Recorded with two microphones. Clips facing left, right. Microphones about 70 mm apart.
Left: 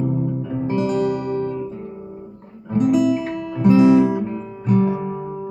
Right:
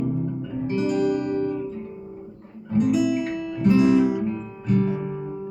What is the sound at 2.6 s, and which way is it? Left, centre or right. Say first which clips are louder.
Guitar: left 4 dB; left.